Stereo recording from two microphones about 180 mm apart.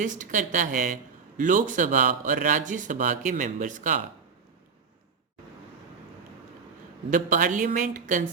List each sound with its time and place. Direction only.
0.0 s speech: 45° right (ahead or behind)
7.1 s speech: 45° right (ahead or behind)